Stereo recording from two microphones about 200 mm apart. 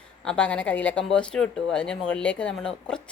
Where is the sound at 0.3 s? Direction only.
5° left (ahead or behind).